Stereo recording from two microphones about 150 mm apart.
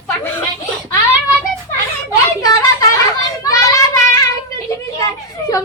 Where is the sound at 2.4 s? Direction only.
25° left (ahead or behind).